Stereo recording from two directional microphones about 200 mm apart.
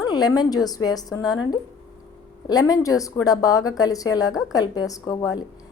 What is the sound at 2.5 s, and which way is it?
A woman's voice, 20° left (ahead or behind).